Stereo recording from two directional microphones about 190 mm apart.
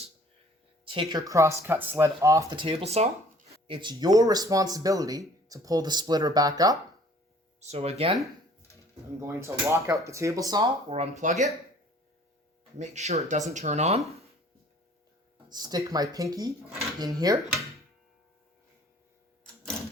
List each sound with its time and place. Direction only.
0.9 s speech: 25° right (ahead or behind)
7.6 s speech: 35° right (ahead or behind)
9.2 s speech: 15° right (ahead or behind)
10.9 s speech: 40° right (ahead or behind)
12.8 s speech: 35° right (ahead or behind)
15.4 s speech: 20° right (ahead or behind)